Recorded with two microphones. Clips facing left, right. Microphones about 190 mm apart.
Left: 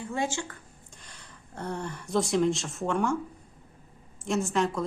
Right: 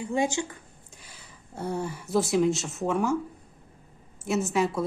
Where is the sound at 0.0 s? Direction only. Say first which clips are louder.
Right 4 dB; 15° right (ahead or behind).